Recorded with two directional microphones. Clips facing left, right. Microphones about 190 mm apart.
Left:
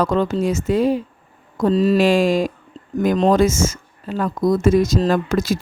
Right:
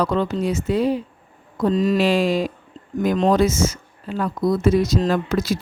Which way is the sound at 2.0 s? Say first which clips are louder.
Left 3 dB; 45° left (ahead or behind).